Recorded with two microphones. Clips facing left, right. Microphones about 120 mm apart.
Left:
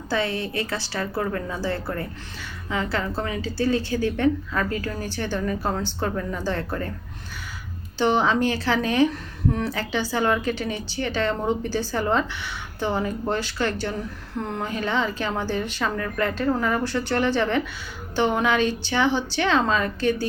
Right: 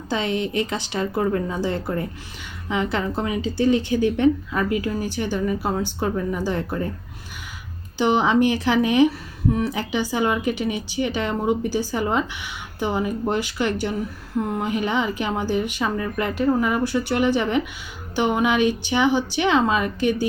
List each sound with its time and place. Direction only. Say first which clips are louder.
0.1 s a woman's voice: right 2 dB; 20° right (ahead or behind)
7.9 s a woman's voice: right 2 dB; 15° right (ahead or behind)